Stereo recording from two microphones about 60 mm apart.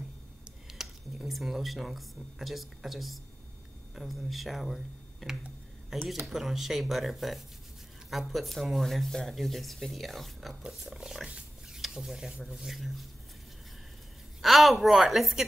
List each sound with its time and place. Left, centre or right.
0.7 s speech: centre
10.6 s speech: centre
14.4 s speech: centre